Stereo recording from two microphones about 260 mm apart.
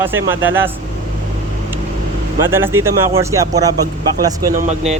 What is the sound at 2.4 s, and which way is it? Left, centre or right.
Speech, centre.